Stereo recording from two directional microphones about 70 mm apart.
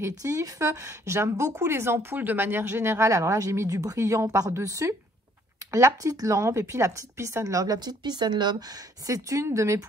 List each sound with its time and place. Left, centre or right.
0.0 s speech: right
9.0 s speech: right